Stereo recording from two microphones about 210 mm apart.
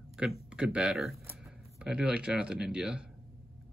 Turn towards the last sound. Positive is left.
turn(degrees=-5)  # may be behind; listen again after turning